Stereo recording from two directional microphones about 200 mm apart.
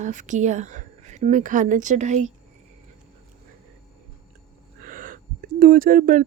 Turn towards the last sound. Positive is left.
turn(degrees=-45)  # may be behind; listen again after turning